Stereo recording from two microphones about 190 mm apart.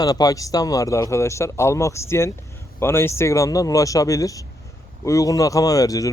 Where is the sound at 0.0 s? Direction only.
20° left (ahead or behind).